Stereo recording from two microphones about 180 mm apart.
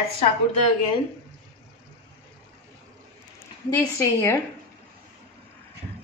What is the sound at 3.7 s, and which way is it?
Speech, 15° left (ahead or behind).